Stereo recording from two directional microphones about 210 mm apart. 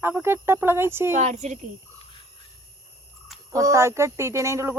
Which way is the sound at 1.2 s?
35° right (ahead or behind).